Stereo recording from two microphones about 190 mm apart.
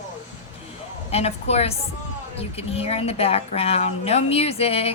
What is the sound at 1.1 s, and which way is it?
A woman's voice, 35° left (ahead or behind).